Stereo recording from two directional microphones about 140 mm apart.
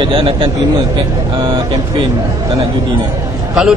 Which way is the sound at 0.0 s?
40° right (ahead or behind).